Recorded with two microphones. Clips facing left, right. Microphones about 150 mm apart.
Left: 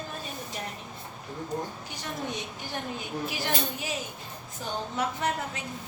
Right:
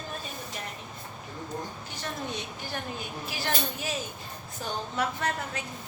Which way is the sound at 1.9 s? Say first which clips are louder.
Even; 15° left (ahead or behind).